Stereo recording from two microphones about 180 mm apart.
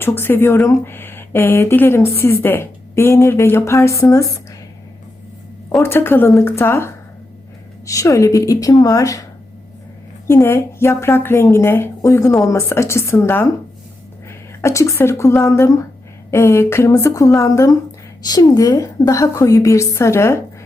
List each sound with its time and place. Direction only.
0.0 s speech: 10° left (ahead or behind)
5.8 s a woman's voice: 10° left (ahead or behind)
10.2 s a woman's voice: 15° left (ahead or behind)